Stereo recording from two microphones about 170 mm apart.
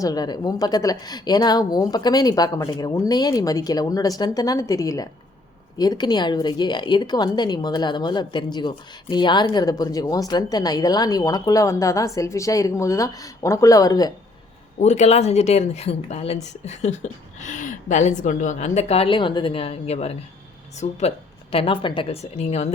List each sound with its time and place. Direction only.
0.0 s speech: 20° left (ahead or behind)
14.8 s speech: 40° left (ahead or behind)